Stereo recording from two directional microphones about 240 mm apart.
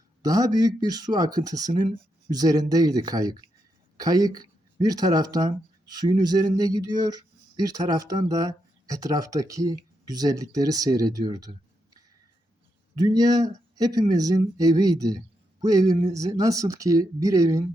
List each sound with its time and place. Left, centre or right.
0.2 s speech: centre
13.0 s speech: centre